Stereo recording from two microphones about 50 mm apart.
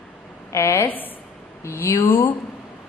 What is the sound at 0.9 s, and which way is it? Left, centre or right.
Speech, left.